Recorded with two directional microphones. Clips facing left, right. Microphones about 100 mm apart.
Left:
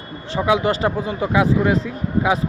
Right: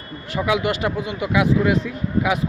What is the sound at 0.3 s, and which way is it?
Speech, 30° left (ahead or behind).